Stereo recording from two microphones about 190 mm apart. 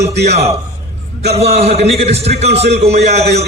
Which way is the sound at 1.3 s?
35° right (ahead or behind).